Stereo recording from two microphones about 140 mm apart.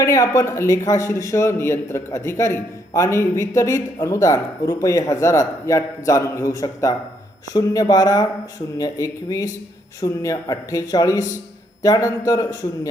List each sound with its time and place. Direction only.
0.0 s a man's voice: 20° left (ahead or behind)